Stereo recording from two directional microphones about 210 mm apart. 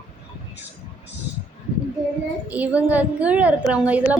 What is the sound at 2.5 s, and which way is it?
A woman's voice, 5° right (ahead or behind).